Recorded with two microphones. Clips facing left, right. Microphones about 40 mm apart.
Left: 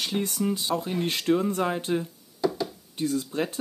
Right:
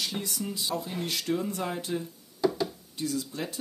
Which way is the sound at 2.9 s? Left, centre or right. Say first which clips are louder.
Left 5 dB; left.